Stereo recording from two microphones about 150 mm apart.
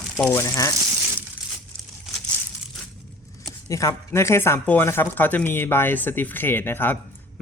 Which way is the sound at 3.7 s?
20° left (ahead or behind).